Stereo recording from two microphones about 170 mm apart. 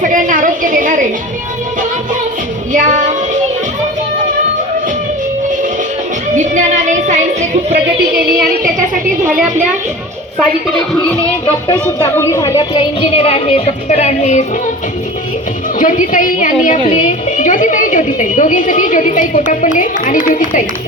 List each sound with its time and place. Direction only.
0.0 s a sound: 50° right (ahead or behind)
2.7 s child singing: 45° right (ahead or behind)
6.3 s music: 45° right (ahead or behind)
11.7 s speech: 25° left (ahead or behind); by 14.4 s 40° left (ahead or behind)
15.8 s a woman's voice: 50° left (ahead or behind)